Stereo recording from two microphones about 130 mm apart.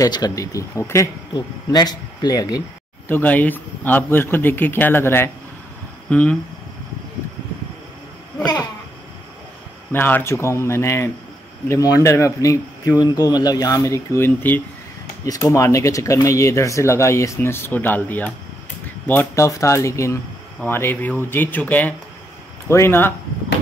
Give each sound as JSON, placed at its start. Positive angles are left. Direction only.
{"t": 0.0, "sound": "speech", "side_deg": 30}
{"t": 3.1, "sound": "speech", "side_deg": 15}
{"t": 9.9, "sound": "speech", "side_deg": 15}
{"t": 15.2, "sound": "speech", "side_deg": 25}